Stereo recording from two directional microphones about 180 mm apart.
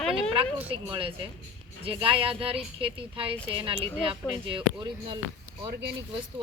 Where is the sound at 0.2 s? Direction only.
30° right (ahead or behind).